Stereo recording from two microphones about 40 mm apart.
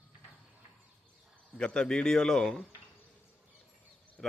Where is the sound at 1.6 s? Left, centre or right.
Centre.